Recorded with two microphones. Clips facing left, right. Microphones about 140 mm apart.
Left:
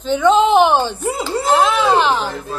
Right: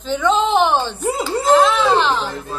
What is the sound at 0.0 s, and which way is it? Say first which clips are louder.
Speech: left 4 dB; centre (ahead or behind).